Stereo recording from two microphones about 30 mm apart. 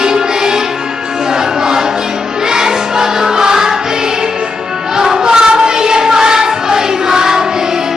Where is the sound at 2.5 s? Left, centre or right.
Centre.